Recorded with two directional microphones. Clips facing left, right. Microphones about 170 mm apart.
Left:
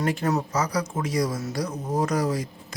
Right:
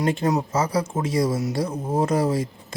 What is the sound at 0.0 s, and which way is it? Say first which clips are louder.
Speech: right 3 dB; 25° right (ahead or behind).